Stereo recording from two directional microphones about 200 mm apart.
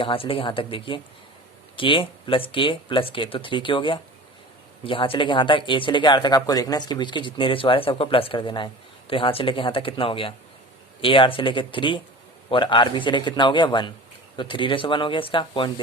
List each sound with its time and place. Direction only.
0.0 s speech: 25° left (ahead or behind)